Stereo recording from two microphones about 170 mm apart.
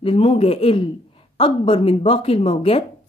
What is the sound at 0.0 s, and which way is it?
A woman's voice, 35° left (ahead or behind).